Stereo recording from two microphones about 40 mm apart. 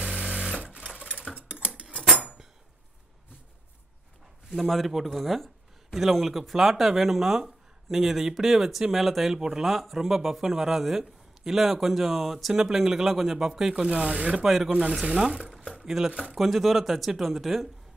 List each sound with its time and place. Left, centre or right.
1.5 s cutlery: right
4.6 s speech: centre
13.8 s speech: right
14.4 s speech: centre
14.7 s speech: right
16.0 s speech: centre